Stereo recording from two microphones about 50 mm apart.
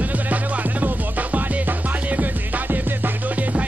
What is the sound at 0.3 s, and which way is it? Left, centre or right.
Music, right.